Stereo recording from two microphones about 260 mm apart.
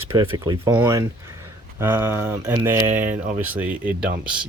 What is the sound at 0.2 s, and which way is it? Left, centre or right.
Speech, centre.